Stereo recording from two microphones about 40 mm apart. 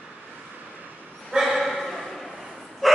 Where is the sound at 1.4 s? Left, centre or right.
Centre.